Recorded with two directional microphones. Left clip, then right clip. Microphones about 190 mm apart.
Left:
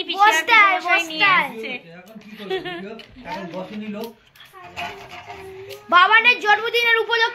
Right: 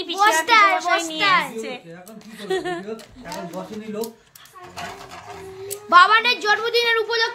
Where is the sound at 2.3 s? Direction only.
50° right (ahead or behind).